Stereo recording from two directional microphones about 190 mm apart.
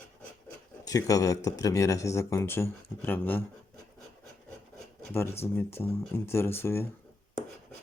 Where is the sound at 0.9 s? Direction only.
20° left (ahead or behind).